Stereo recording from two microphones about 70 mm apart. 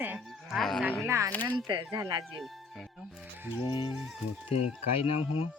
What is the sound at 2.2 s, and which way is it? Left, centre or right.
Speech, centre.